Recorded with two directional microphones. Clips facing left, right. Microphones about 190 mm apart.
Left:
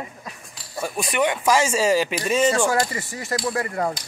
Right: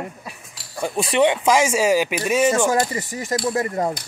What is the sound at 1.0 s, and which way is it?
Speech, 30° right (ahead or behind).